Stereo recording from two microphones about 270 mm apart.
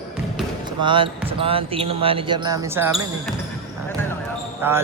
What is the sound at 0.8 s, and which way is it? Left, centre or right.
Speech, centre.